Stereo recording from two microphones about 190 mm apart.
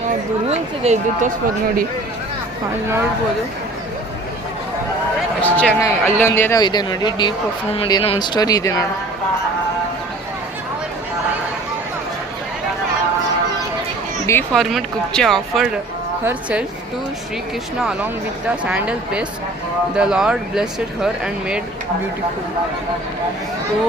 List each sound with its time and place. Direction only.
0.4 s speech: 35° right (ahead or behind)
5.4 s speech: 10° left (ahead or behind)
14.5 s a woman's voice: centre (ahead or behind)
17.7 s speech: 5° right (ahead or behind)